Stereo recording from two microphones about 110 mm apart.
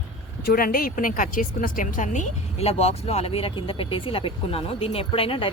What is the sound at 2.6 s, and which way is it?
Speech, 70° left (ahead or behind).